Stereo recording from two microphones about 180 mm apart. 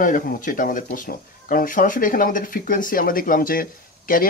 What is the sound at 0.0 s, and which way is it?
Speech, 50° left (ahead or behind).